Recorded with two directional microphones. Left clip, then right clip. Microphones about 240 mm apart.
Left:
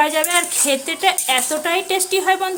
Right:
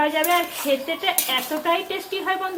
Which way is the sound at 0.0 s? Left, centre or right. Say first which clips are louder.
Left 4 dB; left.